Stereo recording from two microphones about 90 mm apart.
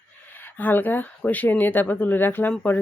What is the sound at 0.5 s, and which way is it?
Speech, 20° left (ahead or behind).